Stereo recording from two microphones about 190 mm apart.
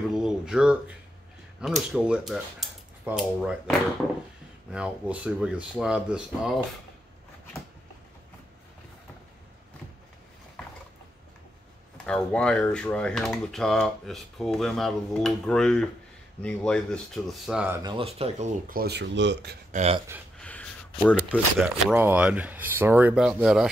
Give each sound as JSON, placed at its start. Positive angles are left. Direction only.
{"t": 0.1, "sound": "a sound", "side_deg": -5}
{"t": 1.6, "sound": "speech", "side_deg": -5}
{"t": 12.1, "sound": "speech", "side_deg": 5}
{"t": 17.8, "sound": "speech", "side_deg": -30}
{"t": 18.7, "sound": "speech", "side_deg": -55}
{"t": 19.7, "sound": "speech", "side_deg": -35}
{"t": 20.3, "sound": "a sound", "side_deg": 5}
{"t": 21.0, "sound": "speech", "side_deg": 0}